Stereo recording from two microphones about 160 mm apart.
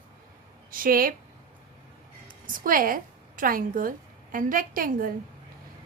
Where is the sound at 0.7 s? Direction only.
60° right (ahead or behind).